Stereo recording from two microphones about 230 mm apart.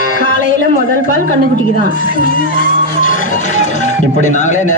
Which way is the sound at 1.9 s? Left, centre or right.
Left.